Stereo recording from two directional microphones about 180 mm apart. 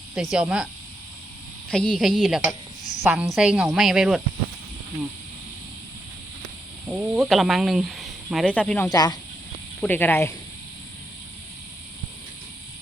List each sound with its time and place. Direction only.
0.1 s speech: centre (ahead or behind)
1.7 s speech: 5° left (ahead or behind)
6.8 s speech: 5° right (ahead or behind)
8.9 s speech: 20° left (ahead or behind)
9.8 s speech: 10° left (ahead or behind)